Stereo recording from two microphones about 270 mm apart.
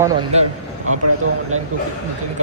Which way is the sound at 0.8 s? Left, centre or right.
Right.